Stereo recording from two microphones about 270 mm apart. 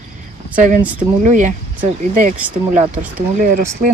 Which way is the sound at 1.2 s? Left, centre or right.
Right.